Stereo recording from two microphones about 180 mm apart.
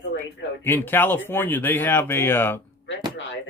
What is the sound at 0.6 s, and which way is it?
Speech, 10° left (ahead or behind).